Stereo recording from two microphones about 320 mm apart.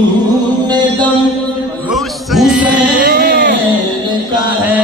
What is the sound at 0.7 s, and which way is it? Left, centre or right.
Mantra, centre.